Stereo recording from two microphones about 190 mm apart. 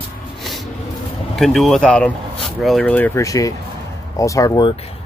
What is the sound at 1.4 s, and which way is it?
Speech, centre (ahead or behind).